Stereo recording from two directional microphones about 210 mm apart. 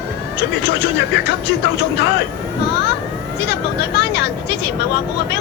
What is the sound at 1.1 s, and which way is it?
Speech, 55° left (ahead or behind).